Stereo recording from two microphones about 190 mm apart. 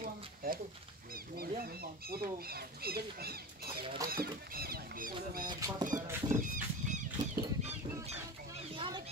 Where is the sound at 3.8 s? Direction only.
25° right (ahead or behind).